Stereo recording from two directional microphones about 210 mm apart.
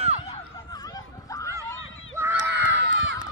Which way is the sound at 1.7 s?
70° left (ahead or behind).